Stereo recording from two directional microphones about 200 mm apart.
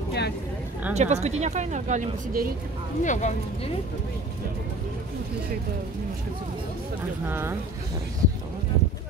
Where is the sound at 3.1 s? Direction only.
35° left (ahead or behind).